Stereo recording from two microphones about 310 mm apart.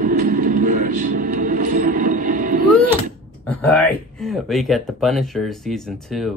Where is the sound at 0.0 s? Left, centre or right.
Right.